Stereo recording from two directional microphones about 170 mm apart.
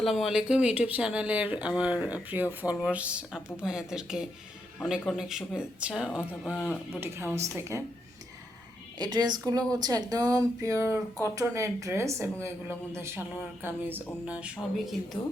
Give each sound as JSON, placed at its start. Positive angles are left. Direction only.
{"t": 0.0, "sound": "speech", "side_deg": 0}
{"t": 7.0, "sound": "speech", "side_deg": -15}
{"t": 9.0, "sound": "a woman's voice", "side_deg": -25}